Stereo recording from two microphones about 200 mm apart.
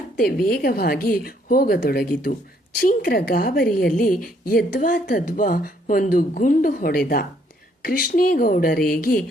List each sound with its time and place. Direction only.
0.2 s a woman's voice: 45° left (ahead or behind)